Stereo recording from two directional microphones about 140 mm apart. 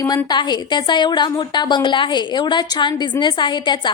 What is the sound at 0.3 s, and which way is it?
A woman's voice, 30° left (ahead or behind).